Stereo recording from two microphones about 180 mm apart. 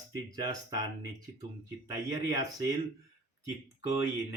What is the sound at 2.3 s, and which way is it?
Speech, 20° right (ahead or behind).